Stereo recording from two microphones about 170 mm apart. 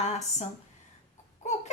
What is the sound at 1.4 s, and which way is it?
Baby cry, 45° left (ahead or behind).